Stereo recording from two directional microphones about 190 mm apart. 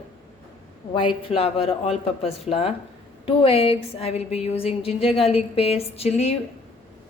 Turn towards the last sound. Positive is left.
turn(degrees=30)  # may be behind; listen again after turning